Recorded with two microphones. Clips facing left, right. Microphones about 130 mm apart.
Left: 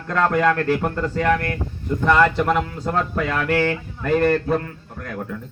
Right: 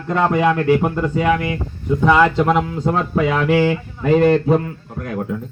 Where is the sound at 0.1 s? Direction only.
10° right (ahead or behind).